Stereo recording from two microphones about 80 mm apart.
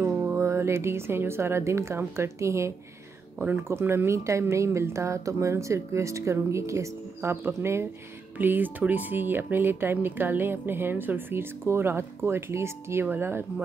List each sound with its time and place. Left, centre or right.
0.0 s speech: right
3.3 s speech: right